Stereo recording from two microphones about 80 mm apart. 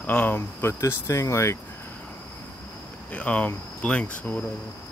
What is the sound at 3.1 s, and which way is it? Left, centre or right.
Speech, centre.